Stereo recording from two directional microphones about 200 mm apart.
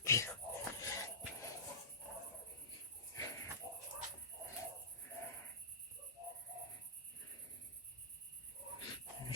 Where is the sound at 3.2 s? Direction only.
15° left (ahead or behind).